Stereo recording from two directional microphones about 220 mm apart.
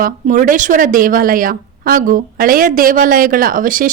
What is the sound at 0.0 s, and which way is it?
A woman's voice, 35° right (ahead or behind).